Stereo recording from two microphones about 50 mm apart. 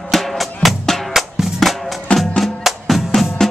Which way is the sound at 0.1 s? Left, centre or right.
Centre.